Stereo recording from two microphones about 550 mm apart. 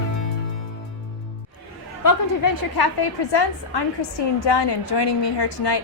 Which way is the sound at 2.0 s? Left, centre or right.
Left.